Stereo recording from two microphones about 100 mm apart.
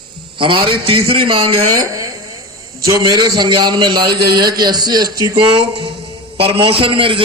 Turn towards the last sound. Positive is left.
turn(degrees=-65)  # may be behind; listen again after turning